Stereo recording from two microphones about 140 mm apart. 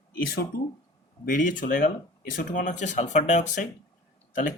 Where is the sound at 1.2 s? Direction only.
70° left (ahead or behind).